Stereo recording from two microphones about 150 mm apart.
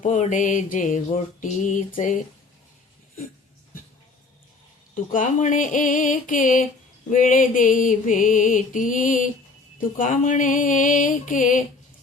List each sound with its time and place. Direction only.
0.0 s mantra: 55° left (ahead or behind)
5.1 s mantra: 60° left (ahead or behind)